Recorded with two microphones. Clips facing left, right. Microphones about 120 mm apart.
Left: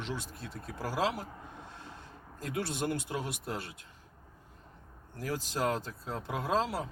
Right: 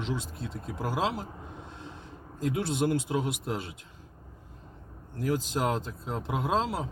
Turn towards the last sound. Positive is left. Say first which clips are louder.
# right 2 dB
turn(degrees=-20)  # may be behind; listen again after turning